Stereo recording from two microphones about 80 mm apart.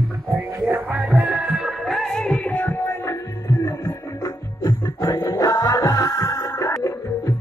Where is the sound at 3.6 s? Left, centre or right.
Left.